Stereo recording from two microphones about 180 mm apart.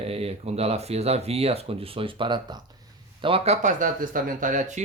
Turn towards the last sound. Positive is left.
turn(degrees=-45)  # may be behind; listen again after turning